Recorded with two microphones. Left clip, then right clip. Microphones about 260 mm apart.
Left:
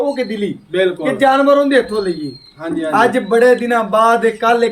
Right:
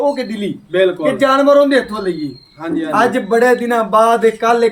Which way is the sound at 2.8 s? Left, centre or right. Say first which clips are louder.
Left 1 dB; centre.